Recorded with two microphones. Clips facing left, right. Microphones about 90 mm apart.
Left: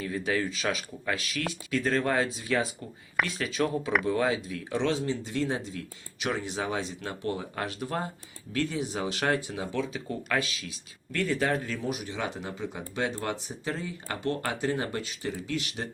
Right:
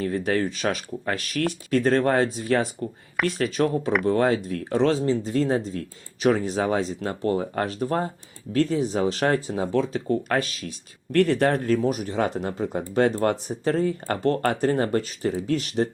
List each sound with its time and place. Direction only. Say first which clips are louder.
0.0 s speech: right 6 dB; 45° right (ahead or behind)
11.1 s speech: right 8 dB; 60° right (ahead or behind); by 15.9 s 40° right (ahead or behind)